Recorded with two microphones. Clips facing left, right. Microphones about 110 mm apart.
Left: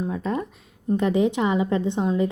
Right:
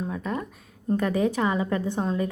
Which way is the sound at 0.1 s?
30° left (ahead or behind).